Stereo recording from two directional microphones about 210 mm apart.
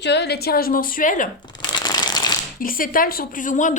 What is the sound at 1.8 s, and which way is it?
Shuffling cards, 20° left (ahead or behind).